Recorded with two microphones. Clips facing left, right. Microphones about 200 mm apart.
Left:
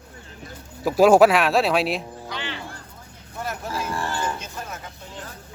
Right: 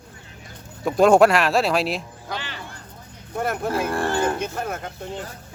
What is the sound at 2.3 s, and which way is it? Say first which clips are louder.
Music: right 1 dB; 40° right (ahead or behind).